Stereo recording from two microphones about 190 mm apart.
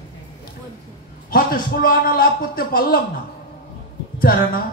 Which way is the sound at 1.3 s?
50° left (ahead or behind).